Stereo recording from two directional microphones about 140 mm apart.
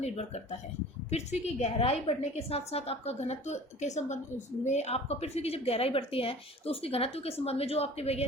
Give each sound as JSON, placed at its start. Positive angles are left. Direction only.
{"t": 0.0, "sound": "a woman's voice", "side_deg": 50}